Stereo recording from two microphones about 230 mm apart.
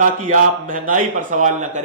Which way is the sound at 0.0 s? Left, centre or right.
Right.